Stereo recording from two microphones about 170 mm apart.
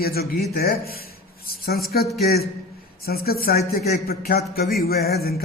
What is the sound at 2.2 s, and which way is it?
A man's voice, 65° left (ahead or behind).